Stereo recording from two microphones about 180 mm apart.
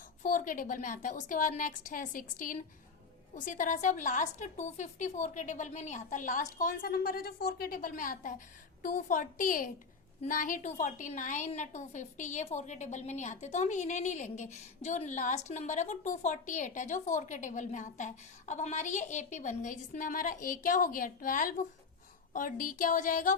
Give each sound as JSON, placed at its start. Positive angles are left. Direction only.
{"t": 0.2, "sound": "a woman's voice", "side_deg": 45}